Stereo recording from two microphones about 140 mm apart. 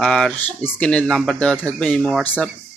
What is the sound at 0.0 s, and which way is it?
Cricket, 5° left (ahead or behind).